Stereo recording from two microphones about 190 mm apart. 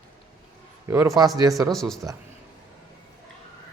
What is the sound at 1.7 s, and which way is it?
Speech, centre (ahead or behind).